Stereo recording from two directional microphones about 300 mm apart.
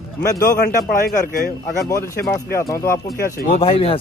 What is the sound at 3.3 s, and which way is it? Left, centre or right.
Speech, left.